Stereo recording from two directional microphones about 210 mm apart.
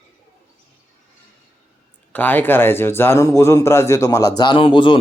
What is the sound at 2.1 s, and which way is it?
A man's voice, 10° left (ahead or behind).